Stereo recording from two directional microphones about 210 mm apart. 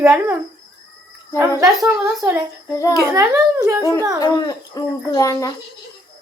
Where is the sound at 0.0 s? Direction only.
10° right (ahead or behind).